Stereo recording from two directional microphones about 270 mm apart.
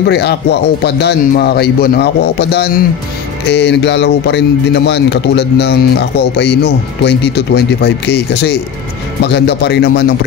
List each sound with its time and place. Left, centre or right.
0.0 s speech: left